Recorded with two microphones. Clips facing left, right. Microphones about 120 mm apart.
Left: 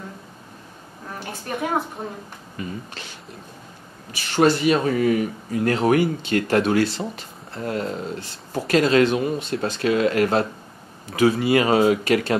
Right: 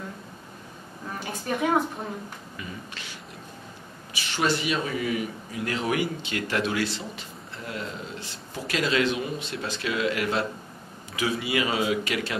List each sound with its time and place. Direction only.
1.2 s a woman's voice: centre (ahead or behind)
2.5 s speech: 40° left (ahead or behind)
4.3 s speech: 40° left (ahead or behind)